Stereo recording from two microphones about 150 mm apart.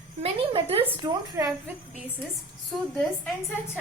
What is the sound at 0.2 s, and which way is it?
Speech, 40° right (ahead or behind).